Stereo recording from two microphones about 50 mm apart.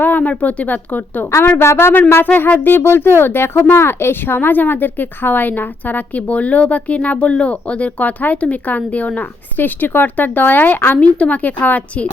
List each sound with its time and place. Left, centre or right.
0.0 s speech: left
1.5 s speech: left
2.2 s a sound: left
3.2 s speech: left